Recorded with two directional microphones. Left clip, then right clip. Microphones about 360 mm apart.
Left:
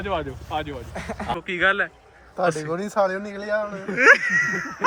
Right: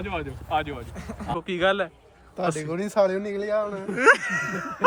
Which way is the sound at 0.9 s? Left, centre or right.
Centre.